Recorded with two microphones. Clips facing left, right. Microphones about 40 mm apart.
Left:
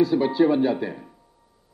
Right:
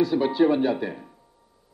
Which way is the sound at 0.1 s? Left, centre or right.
Centre.